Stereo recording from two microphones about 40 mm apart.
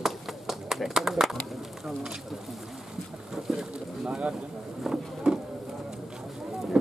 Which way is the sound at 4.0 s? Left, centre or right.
Right.